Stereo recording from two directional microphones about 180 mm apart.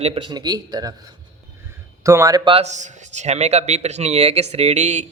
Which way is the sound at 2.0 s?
15° right (ahead or behind).